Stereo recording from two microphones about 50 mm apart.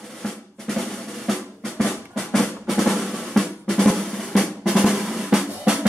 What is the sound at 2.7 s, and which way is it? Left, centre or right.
Drum roll, centre.